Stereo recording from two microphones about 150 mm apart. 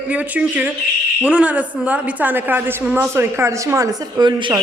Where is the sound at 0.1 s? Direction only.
10° right (ahead or behind).